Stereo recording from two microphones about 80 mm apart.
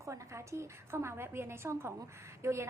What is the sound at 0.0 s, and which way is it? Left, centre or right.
A woman's voice, right.